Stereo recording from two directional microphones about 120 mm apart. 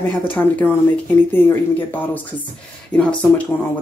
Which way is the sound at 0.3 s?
15° left (ahead or behind).